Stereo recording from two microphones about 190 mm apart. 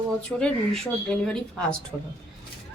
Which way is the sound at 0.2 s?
5° left (ahead or behind).